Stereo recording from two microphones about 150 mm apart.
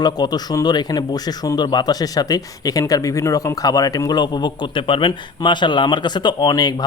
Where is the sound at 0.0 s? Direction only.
25° left (ahead or behind).